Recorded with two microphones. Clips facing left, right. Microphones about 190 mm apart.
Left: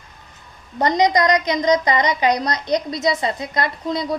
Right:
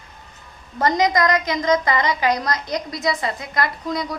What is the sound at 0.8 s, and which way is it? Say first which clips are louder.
A woman's voice: left 2 dB; 20° left (ahead or behind).